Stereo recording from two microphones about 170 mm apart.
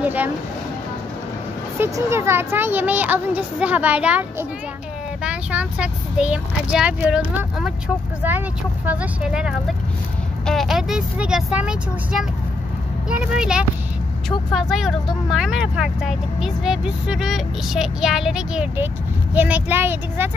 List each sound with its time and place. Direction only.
0.0 s speech: 10° right (ahead or behind)
1.8 s speech: 15° right (ahead or behind)